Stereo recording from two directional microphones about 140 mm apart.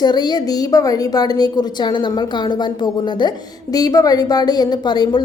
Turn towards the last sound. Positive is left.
turn(degrees=30)  # may be behind; listen again after turning